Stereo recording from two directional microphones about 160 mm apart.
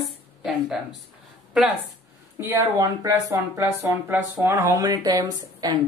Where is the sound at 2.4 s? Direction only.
20° right (ahead or behind).